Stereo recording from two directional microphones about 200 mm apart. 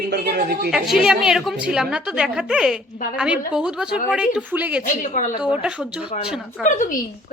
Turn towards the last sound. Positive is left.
turn(degrees=40)  # may be behind; listen again after turning